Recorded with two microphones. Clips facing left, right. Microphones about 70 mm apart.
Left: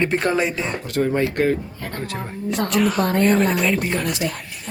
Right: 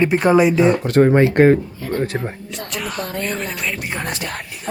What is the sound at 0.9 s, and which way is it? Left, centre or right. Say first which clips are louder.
Speech: right 7 dB; right.